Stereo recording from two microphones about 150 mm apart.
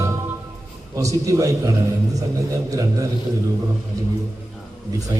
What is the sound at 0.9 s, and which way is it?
A man's voice, 20° right (ahead or behind).